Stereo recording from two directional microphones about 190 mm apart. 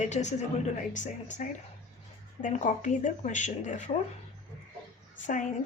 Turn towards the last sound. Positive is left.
turn(degrees=40)  # may be behind; listen again after turning